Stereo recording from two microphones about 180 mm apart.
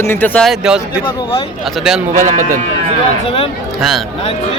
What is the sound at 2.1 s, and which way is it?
Speech, 45° right (ahead or behind).